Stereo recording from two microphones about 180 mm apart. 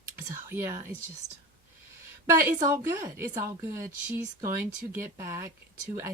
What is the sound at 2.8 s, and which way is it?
Speech, 15° right (ahead or behind).